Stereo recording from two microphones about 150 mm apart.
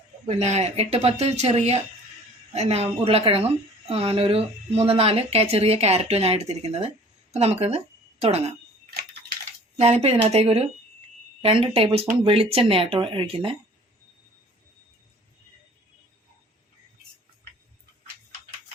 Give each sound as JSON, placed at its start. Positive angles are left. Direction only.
{"t": 0.3, "sound": "a woman's voice", "side_deg": -45}
{"t": 9.7, "sound": "a woman's voice", "side_deg": -45}